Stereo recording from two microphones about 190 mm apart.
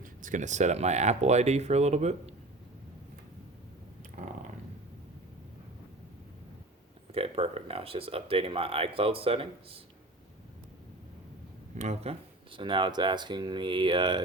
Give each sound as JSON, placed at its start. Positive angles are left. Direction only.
{"t": 0.0, "sound": "speech", "side_deg": -45}
{"t": 4.2, "sound": "a sound", "side_deg": -40}
{"t": 7.1, "sound": "speech", "side_deg": -30}
{"t": 11.8, "sound": "speech", "side_deg": -35}